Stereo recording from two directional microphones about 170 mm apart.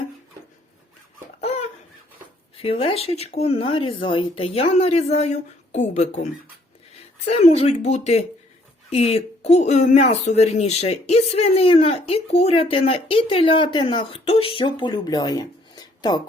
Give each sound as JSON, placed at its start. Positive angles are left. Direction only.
{"t": 1.4, "sound": "laughter", "side_deg": 40}
{"t": 2.6, "sound": "speech", "side_deg": 35}
{"t": 7.3, "sound": "speech", "side_deg": 40}